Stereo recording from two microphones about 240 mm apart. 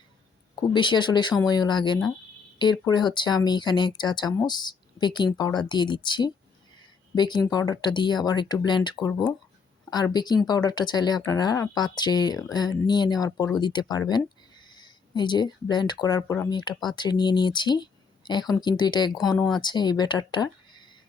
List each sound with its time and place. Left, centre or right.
0.7 s speech: centre